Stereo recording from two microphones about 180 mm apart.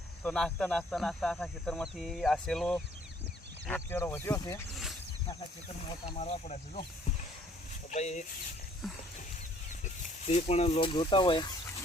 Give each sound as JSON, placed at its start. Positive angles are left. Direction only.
{"t": 0.2, "sound": "speech", "side_deg": 5}
{"t": 4.7, "sound": "a sound", "side_deg": 0}
{"t": 6.1, "sound": "speech", "side_deg": 40}
{"t": 7.9, "sound": "speech", "side_deg": 40}
{"t": 8.8, "sound": "a sound", "side_deg": 0}
{"t": 9.8, "sound": "speech", "side_deg": 35}